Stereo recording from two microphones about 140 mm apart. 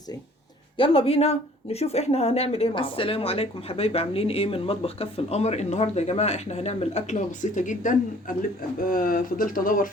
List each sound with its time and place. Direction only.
0.8 s speech: 45° left (ahead or behind); by 9.9 s 80° left